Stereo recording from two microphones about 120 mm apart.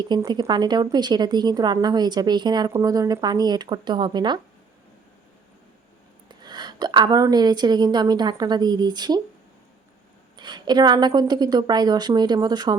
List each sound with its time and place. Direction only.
0.0 s a woman's voice: 35° right (ahead or behind)
6.2 s a woman's voice: 35° right (ahead or behind)
10.3 s a woman's voice: 40° right (ahead or behind)